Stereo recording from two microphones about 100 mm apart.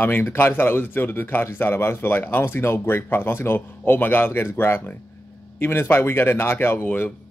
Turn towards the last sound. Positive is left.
turn(degrees=20)  # may be behind; listen again after turning